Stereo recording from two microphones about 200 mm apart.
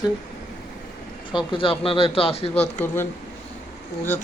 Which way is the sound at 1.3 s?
25° left (ahead or behind).